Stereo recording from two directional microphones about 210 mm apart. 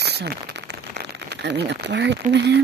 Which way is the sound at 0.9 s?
55° right (ahead or behind).